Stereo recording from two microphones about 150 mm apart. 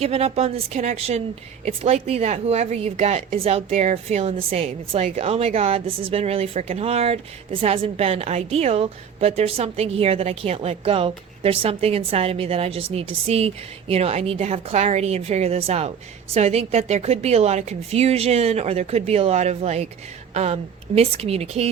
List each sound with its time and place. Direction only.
0.0 s a woman's voice: 45° right (ahead or behind)